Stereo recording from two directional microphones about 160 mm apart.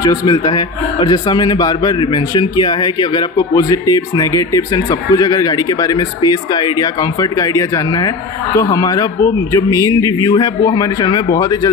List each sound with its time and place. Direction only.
0.0 s a man's voice: 25° left (ahead or behind)